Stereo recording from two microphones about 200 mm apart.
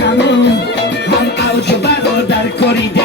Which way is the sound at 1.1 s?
55° left (ahead or behind).